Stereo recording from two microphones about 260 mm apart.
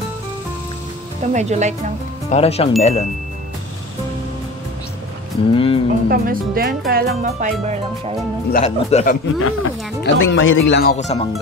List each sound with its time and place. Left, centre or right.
1.3 s speech: right
2.2 s speech: left
5.5 s speech: left
6.0 s speech: right
8.5 s speech: left
9.4 s speech: left